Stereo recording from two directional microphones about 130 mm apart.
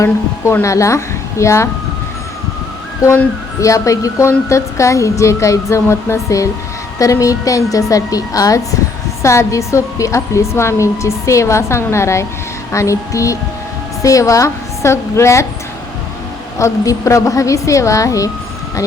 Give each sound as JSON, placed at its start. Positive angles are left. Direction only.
{"t": 0.0, "sound": "a woman's voice", "side_deg": 20}
{"t": 3.1, "sound": "a woman's voice", "side_deg": 20}
{"t": 16.6, "sound": "a woman's voice", "side_deg": 25}